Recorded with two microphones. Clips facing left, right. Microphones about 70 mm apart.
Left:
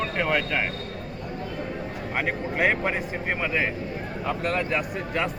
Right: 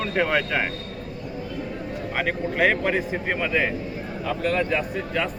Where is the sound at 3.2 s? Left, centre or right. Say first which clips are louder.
Right 1 dB; centre.